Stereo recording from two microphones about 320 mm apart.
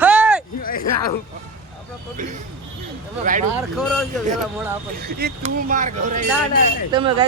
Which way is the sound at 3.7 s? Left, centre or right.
Centre.